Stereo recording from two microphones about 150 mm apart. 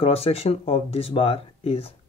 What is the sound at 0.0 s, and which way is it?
Speech, 40° left (ahead or behind).